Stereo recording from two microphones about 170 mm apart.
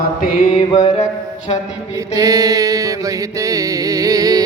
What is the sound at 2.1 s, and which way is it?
Mantra, 20° right (ahead or behind).